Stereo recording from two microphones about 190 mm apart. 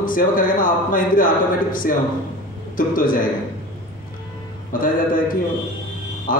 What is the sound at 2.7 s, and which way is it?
Speech, 45° left (ahead or behind).